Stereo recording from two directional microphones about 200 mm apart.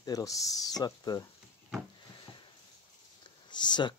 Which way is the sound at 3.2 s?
20° left (ahead or behind).